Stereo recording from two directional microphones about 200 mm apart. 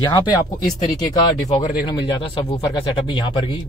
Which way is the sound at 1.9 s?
25° left (ahead or behind).